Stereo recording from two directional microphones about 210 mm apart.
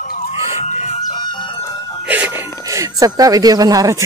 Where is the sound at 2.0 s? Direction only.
10° right (ahead or behind).